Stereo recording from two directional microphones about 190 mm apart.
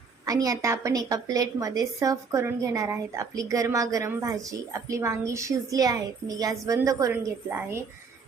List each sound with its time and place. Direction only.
0.3 s a woman's voice: 20° right (ahead or behind)